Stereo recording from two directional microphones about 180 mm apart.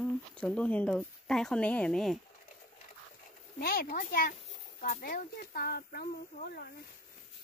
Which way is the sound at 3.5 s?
55° left (ahead or behind).